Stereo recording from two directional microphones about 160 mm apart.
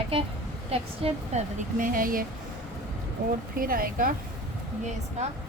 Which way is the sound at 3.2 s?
70° right (ahead or behind).